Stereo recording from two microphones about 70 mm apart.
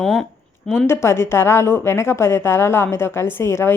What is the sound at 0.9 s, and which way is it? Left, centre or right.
A woman's voice, left.